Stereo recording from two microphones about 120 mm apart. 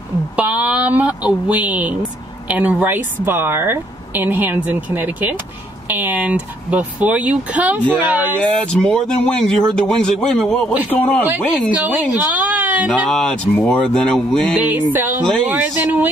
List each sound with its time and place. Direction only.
0.4 s a woman's voice: 10° right (ahead or behind)
8.7 s a man's voice: 5° left (ahead or behind)
11.7 s a woman's voice: 15° right (ahead or behind)
12.4 s a sound: 10° right (ahead or behind)
13.1 s speech: 5° left (ahead or behind)
14.6 s a woman's voice: 15° right (ahead or behind)